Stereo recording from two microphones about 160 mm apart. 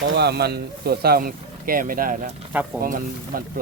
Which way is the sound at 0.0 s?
90° right.